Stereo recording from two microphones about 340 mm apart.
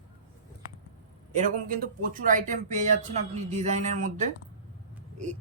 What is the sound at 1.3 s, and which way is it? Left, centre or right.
Speech, right.